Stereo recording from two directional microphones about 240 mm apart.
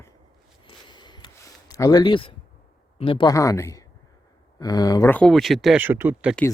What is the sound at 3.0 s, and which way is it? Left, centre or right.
Speech, left.